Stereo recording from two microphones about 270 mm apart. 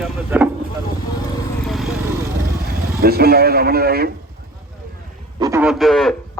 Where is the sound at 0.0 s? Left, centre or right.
Centre.